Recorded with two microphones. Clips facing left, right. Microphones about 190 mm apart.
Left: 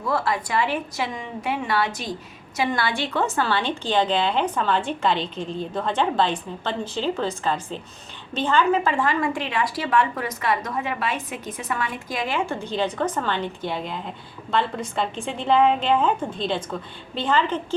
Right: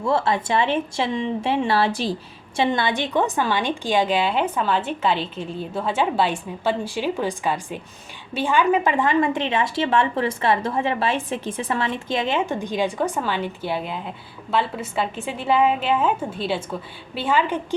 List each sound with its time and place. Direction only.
0.0 s a woman's voice: 25° right (ahead or behind)